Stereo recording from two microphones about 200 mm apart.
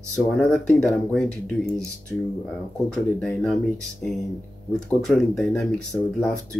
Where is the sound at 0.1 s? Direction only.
5° left (ahead or behind).